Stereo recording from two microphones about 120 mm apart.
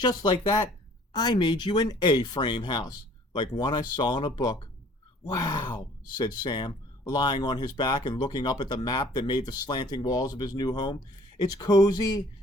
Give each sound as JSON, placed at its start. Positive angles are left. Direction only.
{"t": 0.0, "sound": "speech", "side_deg": 35}